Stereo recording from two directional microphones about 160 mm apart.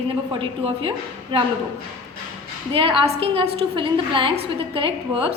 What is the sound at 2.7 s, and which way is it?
A woman's voice, 35° right (ahead or behind).